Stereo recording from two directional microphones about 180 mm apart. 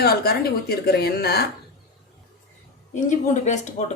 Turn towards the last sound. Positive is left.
turn(degrees=40)  # may be behind; listen again after turning